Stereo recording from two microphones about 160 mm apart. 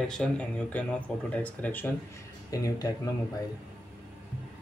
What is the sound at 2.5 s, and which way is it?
Speech, 25° left (ahead or behind).